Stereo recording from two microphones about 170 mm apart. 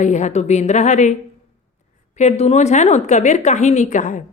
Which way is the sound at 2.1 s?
40° left (ahead or behind).